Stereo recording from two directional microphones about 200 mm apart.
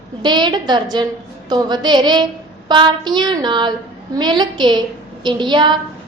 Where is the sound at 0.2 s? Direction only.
20° right (ahead or behind).